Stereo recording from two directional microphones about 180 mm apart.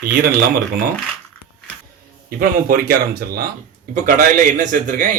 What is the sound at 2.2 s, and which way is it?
Speech, 55° right (ahead or behind).